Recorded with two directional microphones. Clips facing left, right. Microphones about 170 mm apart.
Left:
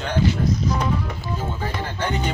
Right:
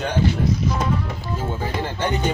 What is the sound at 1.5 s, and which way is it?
Music, 15° right (ahead or behind).